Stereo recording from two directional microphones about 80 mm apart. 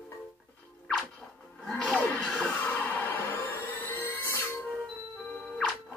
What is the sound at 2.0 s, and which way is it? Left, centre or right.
Music, left.